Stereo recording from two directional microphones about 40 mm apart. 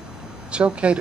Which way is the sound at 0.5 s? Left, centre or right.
Right.